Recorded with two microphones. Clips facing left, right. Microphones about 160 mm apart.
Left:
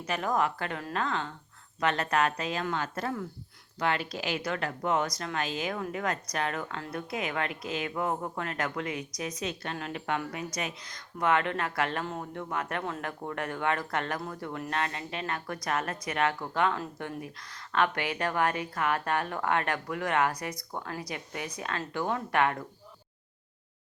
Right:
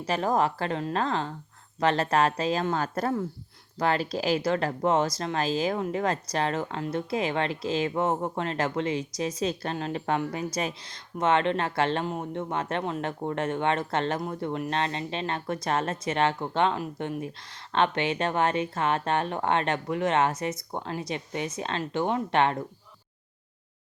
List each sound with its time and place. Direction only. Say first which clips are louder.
0.0 s a woman's voice: right 4 dB; 30° right (ahead or behind)